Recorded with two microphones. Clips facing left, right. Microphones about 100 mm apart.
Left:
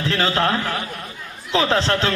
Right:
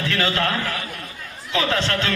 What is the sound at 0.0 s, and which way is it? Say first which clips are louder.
A man's voice: left 2 dB; 30° left (ahead or behind).